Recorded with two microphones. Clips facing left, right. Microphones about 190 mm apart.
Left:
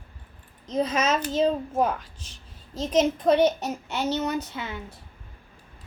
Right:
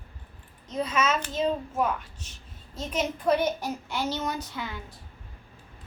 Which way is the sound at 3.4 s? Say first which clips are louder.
Left 6 dB; 75° left (ahead or behind).